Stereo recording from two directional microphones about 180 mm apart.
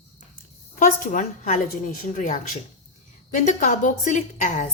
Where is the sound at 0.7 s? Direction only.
50° left (ahead or behind).